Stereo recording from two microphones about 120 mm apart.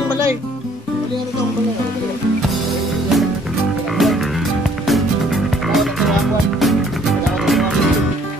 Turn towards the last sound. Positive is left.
turn(degrees=0)  # may be behind; listen again after turning